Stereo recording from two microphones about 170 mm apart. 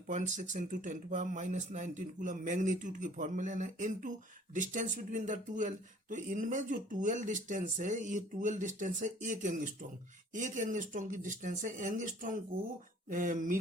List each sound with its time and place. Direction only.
0.1 s speech: 45° right (ahead or behind)